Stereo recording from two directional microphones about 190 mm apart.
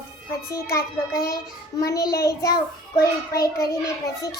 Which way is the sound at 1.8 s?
15° left (ahead or behind).